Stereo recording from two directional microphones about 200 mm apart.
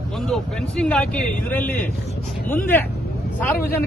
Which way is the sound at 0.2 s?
Centre (ahead or behind).